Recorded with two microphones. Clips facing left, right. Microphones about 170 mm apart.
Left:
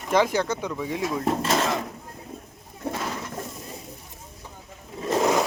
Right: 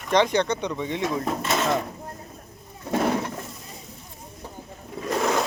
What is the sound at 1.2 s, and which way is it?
Speech, 30° left (ahead or behind).